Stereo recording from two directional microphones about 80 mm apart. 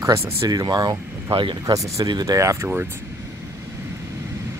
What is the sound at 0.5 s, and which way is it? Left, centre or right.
Speech, right.